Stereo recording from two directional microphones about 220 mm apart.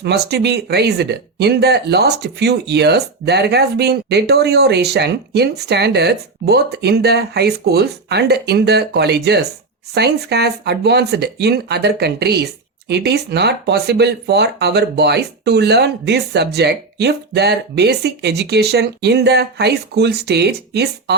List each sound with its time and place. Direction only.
0.0 s speech: 50° right (ahead or behind)